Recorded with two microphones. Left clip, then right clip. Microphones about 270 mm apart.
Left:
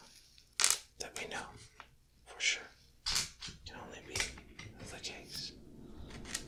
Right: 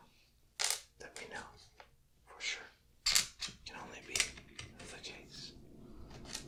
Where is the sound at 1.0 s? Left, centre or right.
Centre.